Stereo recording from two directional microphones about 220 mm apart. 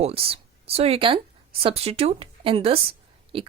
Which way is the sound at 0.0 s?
25° right (ahead or behind).